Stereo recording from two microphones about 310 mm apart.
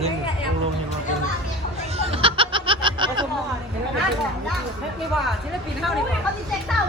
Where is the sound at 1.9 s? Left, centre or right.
Centre.